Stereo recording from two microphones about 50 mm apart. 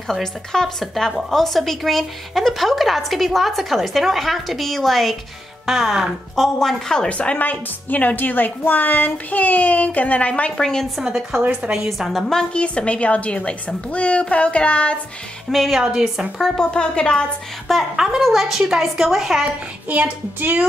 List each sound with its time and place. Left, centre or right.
0.1 s speech: centre
7.1 s a woman's voice: left
10.6 s a woman's voice: centre
11.0 s a woman's voice: centre
12.1 s a woman's voice: centre
12.5 s a woman's voice: left
15.5 s a woman's voice: centre
16.3 s a woman's voice: centre
16.7 s a woman's voice: centre
17.9 s a woman's voice: centre
19.9 s music: right